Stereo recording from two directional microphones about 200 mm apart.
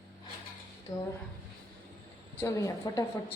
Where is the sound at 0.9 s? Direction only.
20° left (ahead or behind).